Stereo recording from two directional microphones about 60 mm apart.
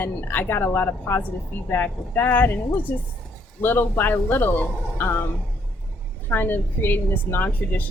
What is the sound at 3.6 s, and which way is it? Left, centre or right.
A woman's voice, left.